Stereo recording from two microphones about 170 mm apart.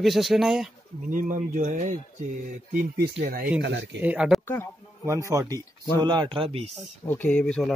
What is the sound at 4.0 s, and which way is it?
Speech, 10° right (ahead or behind).